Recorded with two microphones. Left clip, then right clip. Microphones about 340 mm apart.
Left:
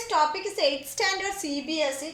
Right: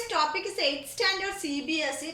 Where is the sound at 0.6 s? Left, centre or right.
Centre.